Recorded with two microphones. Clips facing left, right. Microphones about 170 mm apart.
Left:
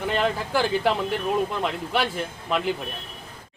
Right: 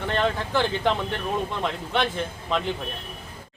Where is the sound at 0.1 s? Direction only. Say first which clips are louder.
Even; 10° left (ahead or behind).